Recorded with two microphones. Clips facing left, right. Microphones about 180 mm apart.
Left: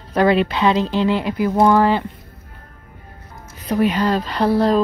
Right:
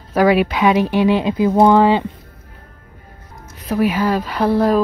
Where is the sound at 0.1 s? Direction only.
10° right (ahead or behind).